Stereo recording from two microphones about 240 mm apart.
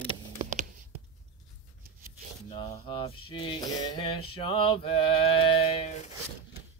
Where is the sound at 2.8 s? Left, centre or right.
Left.